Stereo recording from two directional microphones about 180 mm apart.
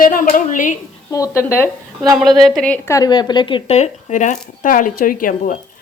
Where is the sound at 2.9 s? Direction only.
20° left (ahead or behind); by 5.6 s 50° left (ahead or behind).